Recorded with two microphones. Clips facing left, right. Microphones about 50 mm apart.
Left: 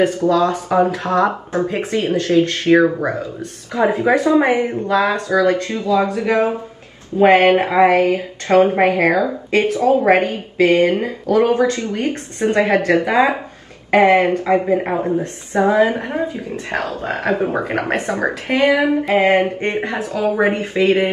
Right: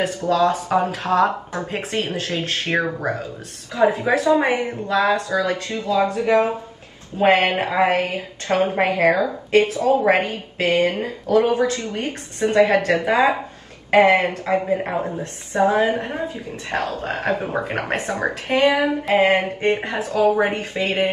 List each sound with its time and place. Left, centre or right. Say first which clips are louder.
0.0 s speech: left 4 dB; left
7.8 s speech: left 6 dB; left